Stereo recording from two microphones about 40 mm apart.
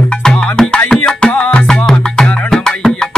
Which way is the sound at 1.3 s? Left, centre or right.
Left.